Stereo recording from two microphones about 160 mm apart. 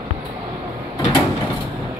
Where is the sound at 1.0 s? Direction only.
25° left (ahead or behind).